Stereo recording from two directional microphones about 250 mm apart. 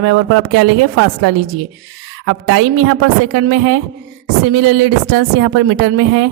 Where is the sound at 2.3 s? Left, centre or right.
Right.